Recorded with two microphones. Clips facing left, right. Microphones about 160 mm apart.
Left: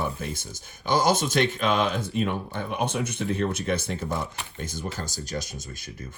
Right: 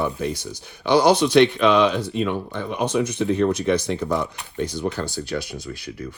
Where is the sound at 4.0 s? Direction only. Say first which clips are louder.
Right 7 dB; 65° right (ahead or behind).